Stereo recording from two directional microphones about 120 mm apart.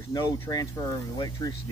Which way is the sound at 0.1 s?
30° left (ahead or behind).